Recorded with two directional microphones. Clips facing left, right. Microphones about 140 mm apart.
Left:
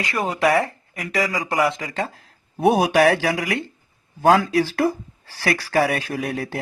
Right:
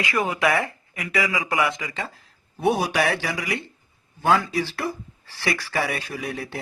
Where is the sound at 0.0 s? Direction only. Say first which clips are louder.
Left 2 dB; 30° left (ahead or behind).